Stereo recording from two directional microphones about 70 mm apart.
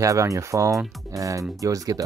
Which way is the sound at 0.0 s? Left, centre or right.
Right.